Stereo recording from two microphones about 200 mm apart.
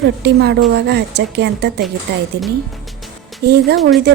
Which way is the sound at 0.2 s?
55° right (ahead or behind).